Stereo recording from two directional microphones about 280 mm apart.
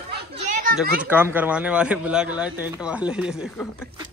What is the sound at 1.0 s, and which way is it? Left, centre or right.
Speech, centre.